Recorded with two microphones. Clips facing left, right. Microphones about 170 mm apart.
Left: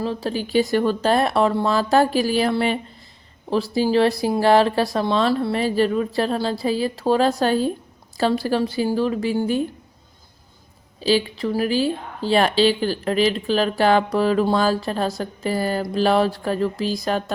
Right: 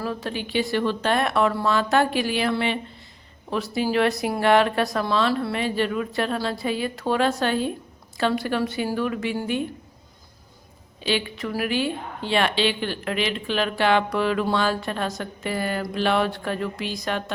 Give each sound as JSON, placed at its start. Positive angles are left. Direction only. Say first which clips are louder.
{"t": 0.0, "sound": "a woman's voice", "louder": "left 4 dB", "side_deg": 30}
{"t": 11.0, "sound": "a woman's voice", "louder": "left 6 dB", "side_deg": 35}